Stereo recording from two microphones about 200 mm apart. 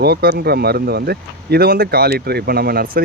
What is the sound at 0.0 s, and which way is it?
Speech, 55° right (ahead or behind).